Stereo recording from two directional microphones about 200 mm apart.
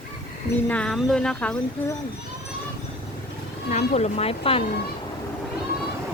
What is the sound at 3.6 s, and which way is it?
Speech, 35° left (ahead or behind).